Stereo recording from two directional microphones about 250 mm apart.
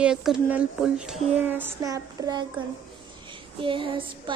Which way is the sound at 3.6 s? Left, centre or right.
Centre.